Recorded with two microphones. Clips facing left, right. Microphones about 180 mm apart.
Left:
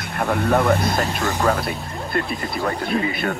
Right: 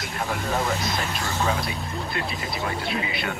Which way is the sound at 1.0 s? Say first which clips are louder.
Left 6 dB; 45° left (ahead or behind).